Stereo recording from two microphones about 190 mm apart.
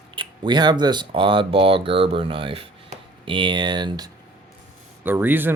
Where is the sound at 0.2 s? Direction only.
25° right (ahead or behind).